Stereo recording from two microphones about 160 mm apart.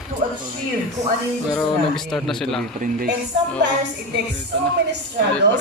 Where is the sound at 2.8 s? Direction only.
65° right (ahead or behind).